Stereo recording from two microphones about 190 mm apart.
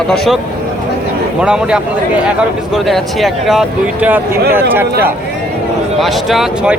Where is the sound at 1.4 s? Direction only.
5° right (ahead or behind).